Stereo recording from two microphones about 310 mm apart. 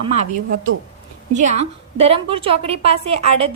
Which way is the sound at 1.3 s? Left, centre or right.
Right.